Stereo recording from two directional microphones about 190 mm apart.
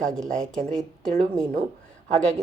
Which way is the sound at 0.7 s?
5° left (ahead or behind).